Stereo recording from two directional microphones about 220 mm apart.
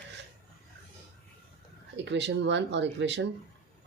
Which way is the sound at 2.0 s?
50° right (ahead or behind).